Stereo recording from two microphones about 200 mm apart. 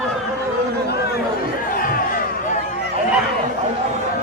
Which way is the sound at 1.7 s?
45° left (ahead or behind).